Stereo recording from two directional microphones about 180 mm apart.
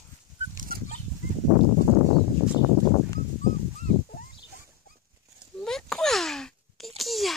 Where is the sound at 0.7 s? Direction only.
55° right (ahead or behind).